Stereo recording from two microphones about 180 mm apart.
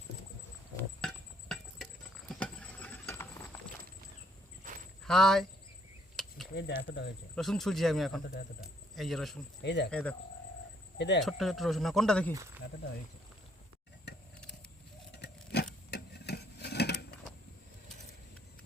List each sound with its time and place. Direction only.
0.8 s a sound: 5° left (ahead or behind)
2.3 s patter: 5° left (ahead or behind)
4.7 s a sound: 45° right (ahead or behind)
5.0 s speech: centre (ahead or behind)
6.1 s a sound: centre (ahead or behind)
6.5 s speech: 65° left (ahead or behind)
7.3 s speech: centre (ahead or behind)
9.6 s speech: 75° left (ahead or behind)
9.9 s speech: 10° left (ahead or behind)
10.9 s speech: 70° left (ahead or behind)
11.2 s speech: centre (ahead or behind)
15.9 s a sound: 65° left (ahead or behind)